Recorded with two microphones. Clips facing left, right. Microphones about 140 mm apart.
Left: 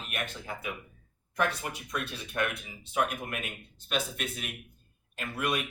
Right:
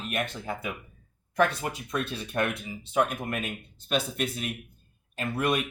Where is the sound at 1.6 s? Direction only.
30° right (ahead or behind).